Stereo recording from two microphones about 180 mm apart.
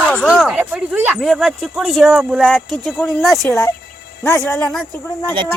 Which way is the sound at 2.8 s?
10° left (ahead or behind).